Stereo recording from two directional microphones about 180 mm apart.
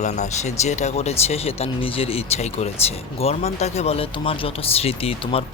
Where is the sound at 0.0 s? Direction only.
40° left (ahead or behind).